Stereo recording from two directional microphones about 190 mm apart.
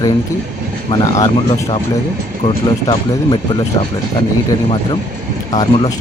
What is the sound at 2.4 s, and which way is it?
Speech, 25° left (ahead or behind).